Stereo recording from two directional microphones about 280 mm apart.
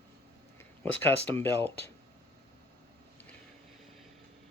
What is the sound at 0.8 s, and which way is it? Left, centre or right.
Speech, centre.